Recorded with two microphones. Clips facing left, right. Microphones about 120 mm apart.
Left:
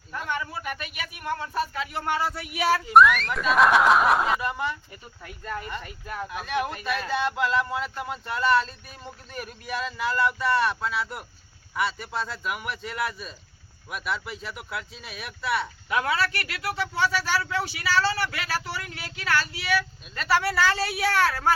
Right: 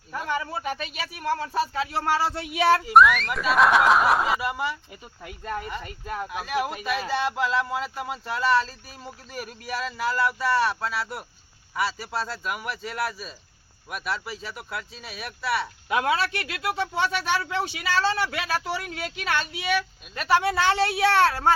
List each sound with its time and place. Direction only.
0.5 s speech: 30° right (ahead or behind)
2.8 s speech: centre (ahead or behind)
15.9 s speech: 25° right (ahead or behind)